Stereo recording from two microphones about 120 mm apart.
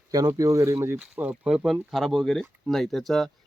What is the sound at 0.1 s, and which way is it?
Speech, 30° right (ahead or behind).